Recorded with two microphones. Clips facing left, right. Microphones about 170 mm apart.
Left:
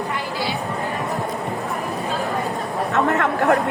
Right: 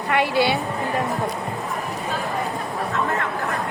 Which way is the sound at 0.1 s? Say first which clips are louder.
Right 6 dB; 75° right (ahead or behind).